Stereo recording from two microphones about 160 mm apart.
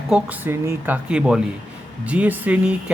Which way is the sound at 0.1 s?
10° right (ahead or behind).